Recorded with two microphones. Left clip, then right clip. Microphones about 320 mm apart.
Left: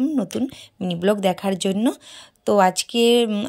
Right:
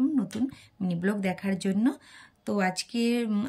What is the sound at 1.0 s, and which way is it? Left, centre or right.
A woman's voice, centre.